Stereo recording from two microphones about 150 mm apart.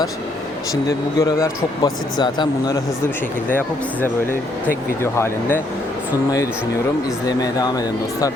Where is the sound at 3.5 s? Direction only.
15° left (ahead or behind).